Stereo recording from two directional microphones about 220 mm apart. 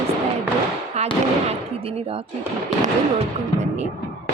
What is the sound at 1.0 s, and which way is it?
Speech, 30° right (ahead or behind).